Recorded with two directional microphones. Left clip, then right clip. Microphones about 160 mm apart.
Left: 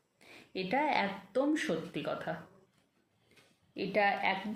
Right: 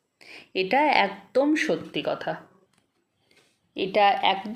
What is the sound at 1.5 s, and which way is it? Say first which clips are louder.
Speech: right 9 dB; 35° right (ahead or behind).